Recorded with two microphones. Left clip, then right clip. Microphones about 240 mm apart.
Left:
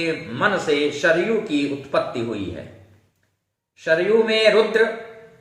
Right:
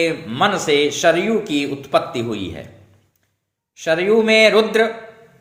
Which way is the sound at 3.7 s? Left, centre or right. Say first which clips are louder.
Right 2 dB; right.